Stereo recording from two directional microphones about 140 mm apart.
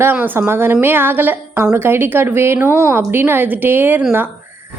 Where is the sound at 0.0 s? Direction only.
15° right (ahead or behind).